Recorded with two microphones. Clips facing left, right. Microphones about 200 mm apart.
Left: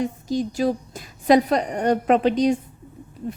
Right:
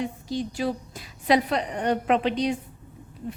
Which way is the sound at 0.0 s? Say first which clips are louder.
Left 5 dB; 45° left (ahead or behind).